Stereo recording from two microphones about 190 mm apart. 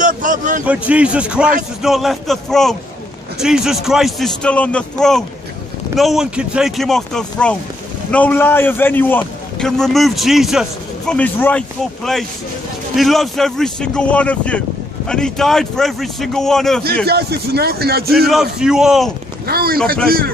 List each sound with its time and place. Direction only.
0.0 s a sound: 45° right (ahead or behind)
0.7 s a man's voice: 5° right (ahead or behind)
17.0 s a man's voice: 55° right (ahead or behind)
18.3 s a man's voice: 5° right (ahead or behind)
19.4 s speech: 55° right (ahead or behind)